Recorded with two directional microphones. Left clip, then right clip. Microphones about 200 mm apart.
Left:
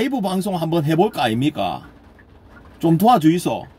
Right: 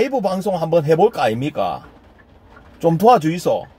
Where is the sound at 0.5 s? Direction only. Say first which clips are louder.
Right 6 dB; 20° left (ahead or behind).